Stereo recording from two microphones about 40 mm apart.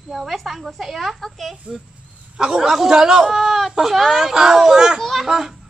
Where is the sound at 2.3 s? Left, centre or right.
Centre.